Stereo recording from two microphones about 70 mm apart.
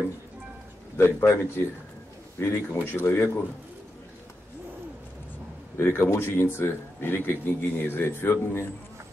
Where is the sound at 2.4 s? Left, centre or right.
Left.